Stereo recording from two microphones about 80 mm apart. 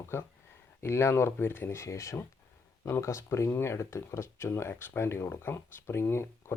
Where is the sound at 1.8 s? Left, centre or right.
Left.